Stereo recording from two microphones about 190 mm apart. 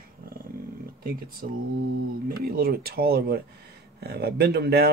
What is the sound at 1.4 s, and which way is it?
Mantra, 45° right (ahead or behind).